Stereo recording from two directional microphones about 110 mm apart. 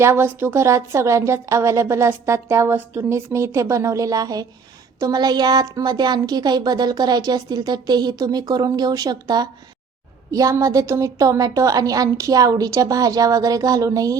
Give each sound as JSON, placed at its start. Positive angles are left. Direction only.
{"t": 0.0, "sound": "a woman's voice", "side_deg": -20}